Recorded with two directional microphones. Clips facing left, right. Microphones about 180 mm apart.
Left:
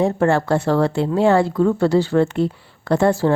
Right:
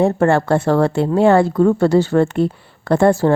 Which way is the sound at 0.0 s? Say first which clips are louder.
Right 3 dB; 55° right (ahead or behind).